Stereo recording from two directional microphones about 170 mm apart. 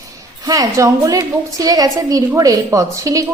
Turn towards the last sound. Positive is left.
turn(degrees=-20)  # may be behind; listen again after turning